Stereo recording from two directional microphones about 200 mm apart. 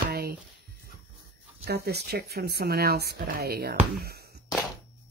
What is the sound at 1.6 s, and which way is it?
Speech, 55° right (ahead or behind).